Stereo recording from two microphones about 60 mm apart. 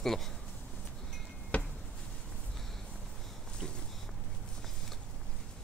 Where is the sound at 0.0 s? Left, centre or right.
Centre.